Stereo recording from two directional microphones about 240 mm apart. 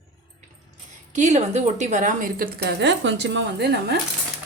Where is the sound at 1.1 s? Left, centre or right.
Right.